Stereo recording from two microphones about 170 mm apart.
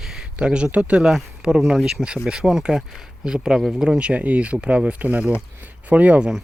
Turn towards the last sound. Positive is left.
turn(degrees=-5)  # may be behind; listen again after turning